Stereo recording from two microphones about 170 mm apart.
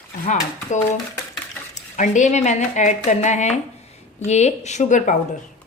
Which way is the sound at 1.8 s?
45° left (ahead or behind).